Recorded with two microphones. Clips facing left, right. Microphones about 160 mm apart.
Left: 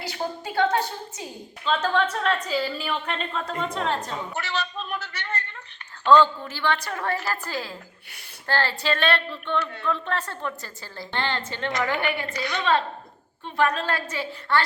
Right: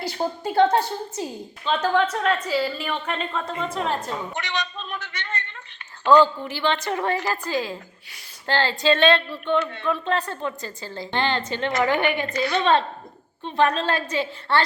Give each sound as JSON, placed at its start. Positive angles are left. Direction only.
{"t": 0.4, "sound": "a woman's voice", "side_deg": -35}
{"t": 1.6, "sound": "a woman's voice", "side_deg": -10}
{"t": 6.1, "sound": "a woman's voice", "side_deg": -10}